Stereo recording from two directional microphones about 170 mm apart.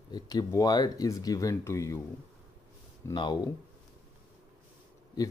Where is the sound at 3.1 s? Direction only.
25° left (ahead or behind).